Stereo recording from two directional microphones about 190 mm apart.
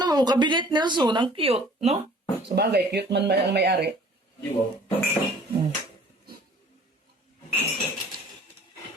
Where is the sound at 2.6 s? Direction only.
60° right (ahead or behind).